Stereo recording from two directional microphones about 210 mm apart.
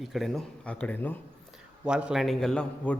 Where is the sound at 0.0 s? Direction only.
Centre (ahead or behind).